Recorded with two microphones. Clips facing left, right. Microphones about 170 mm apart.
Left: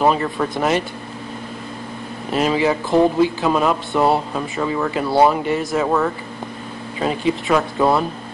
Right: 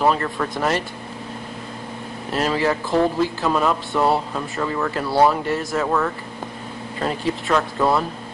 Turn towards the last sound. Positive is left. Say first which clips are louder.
# left 3 dB
turn(degrees=10)  # may be behind; listen again after turning